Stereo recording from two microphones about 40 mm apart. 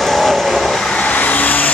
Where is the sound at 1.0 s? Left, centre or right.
Left.